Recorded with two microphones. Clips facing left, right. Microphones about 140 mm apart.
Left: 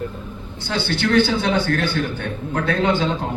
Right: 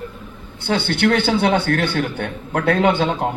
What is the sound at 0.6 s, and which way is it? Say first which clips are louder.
A man's voice: right 4 dB; 55° right (ahead or behind).